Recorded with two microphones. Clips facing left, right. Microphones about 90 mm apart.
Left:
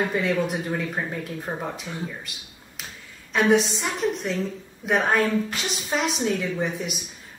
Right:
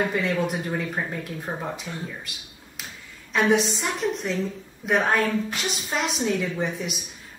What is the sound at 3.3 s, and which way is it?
A woman's voice, centre (ahead or behind).